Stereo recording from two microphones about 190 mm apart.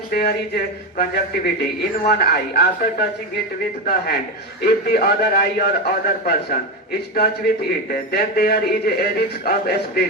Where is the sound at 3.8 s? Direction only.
55° left (ahead or behind).